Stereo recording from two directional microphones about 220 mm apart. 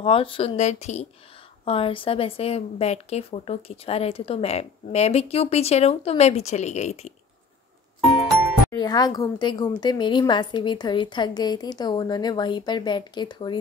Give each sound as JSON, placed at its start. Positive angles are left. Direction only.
{"t": 0.0, "sound": "a woman's voice", "side_deg": 25}
{"t": 8.6, "sound": "a woman's voice", "side_deg": 20}